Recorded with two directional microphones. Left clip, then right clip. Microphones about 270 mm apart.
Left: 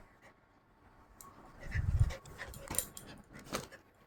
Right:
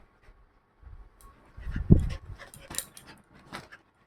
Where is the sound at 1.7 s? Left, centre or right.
Right.